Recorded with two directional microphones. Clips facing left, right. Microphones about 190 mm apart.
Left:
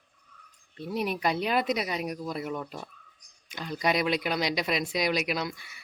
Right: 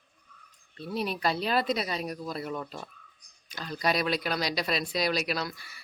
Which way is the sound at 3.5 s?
20° left (ahead or behind).